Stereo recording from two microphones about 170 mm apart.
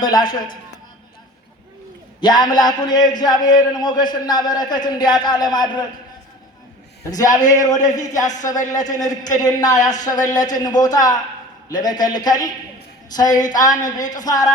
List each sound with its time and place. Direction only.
0.0 s a man's voice: 25° left (ahead or behind)
2.2 s a man's voice: 25° left (ahead or behind)
7.0 s a man's voice: 20° left (ahead or behind)
7.8 s speech: 45° left (ahead or behind)
8.0 s a man's voice: 20° left (ahead or behind)